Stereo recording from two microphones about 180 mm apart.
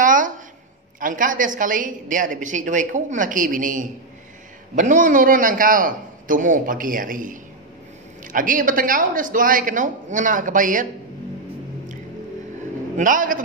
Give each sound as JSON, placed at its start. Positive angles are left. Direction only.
{"t": 0.0, "sound": "a sound", "side_deg": -45}
{"t": 0.9, "sound": "a woman's voice", "side_deg": -50}
{"t": 12.9, "sound": "a woman's voice", "side_deg": -50}